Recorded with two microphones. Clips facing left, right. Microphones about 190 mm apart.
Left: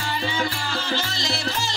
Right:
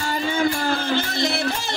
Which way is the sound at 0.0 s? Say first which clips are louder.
Right 5 dB; 45° right (ahead or behind).